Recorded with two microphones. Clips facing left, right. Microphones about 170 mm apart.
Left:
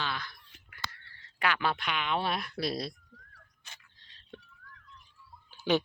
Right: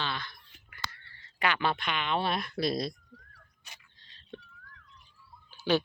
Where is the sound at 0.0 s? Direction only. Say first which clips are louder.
Right 1 dB; 5° left (ahead or behind).